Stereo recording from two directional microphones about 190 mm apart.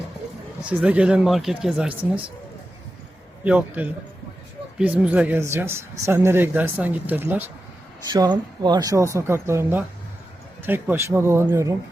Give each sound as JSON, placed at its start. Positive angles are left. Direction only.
{"t": 0.6, "sound": "speech", "side_deg": -5}
{"t": 3.4, "sound": "speech", "side_deg": -5}
{"t": 8.1, "sound": "speech", "side_deg": -20}